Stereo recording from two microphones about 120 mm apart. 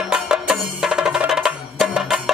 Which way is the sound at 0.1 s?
5° right (ahead or behind).